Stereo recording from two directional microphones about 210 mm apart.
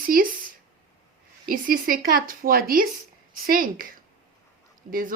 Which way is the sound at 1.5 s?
40° right (ahead or behind).